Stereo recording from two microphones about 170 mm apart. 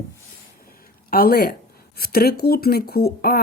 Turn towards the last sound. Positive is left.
turn(degrees=60)  # may be behind; listen again after turning